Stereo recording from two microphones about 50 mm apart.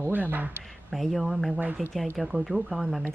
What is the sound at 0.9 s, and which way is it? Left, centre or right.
Speech, centre.